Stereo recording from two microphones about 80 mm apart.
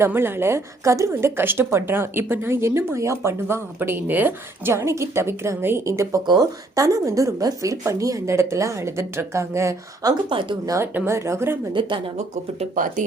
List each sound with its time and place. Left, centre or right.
0.0 s a woman's voice: right
6.2 s a woman's voice: right
10.2 s speech: right
10.9 s a woman's voice: right
11.7 s speech: right